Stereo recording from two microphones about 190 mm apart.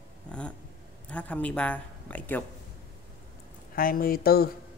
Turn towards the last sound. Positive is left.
turn(degrees=55)  # may be behind; listen again after turning